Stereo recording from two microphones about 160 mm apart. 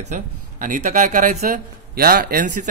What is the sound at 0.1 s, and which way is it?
Speech, 50° right (ahead or behind).